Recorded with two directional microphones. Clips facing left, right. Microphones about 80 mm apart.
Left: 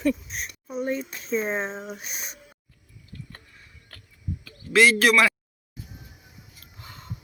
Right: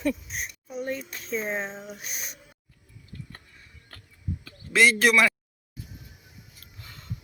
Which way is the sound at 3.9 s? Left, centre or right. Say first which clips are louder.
Right 1 dB; right.